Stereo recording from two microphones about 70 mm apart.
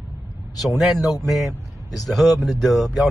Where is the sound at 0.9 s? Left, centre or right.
Left.